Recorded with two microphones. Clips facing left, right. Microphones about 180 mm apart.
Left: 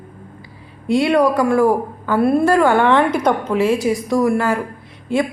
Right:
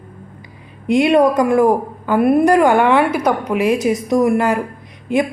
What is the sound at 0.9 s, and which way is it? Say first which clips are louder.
A woman's voice: right 2 dB; 20° right (ahead or behind).